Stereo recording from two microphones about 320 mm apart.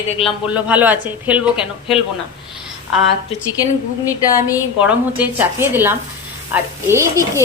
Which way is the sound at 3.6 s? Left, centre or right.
Centre.